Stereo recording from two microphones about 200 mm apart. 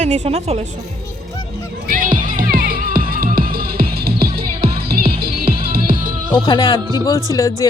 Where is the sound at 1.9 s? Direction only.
45° right (ahead or behind).